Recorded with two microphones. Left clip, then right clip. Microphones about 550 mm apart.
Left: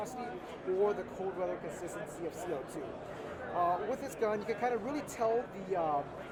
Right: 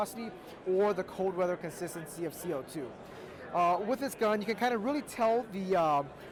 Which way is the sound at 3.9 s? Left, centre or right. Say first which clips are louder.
Right 4 dB; right.